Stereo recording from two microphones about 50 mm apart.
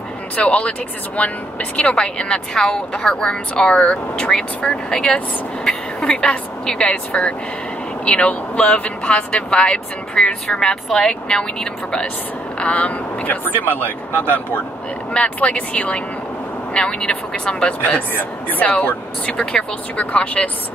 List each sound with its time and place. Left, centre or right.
0.4 s a woman's voice: left
12.5 s speech: left
13.4 s speech: left
15.1 s speech: left
18.1 s speech: left